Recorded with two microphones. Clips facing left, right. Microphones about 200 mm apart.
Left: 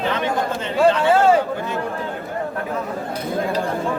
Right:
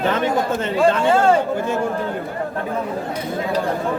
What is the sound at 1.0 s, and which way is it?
Speech, 5° left (ahead or behind).